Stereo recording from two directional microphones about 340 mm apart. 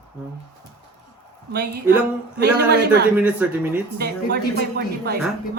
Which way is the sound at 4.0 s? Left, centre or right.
Right.